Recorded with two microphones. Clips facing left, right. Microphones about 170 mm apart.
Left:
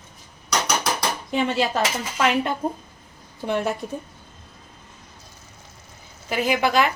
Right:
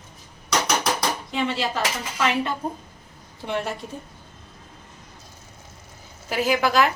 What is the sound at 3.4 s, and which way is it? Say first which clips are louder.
Speech: left 3 dB; 45° left (ahead or behind).